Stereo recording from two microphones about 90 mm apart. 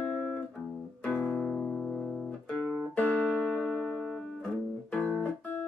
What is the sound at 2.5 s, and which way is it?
Music, 5° left (ahead or behind).